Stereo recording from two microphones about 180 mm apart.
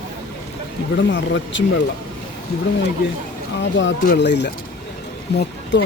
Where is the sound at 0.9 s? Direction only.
85° left.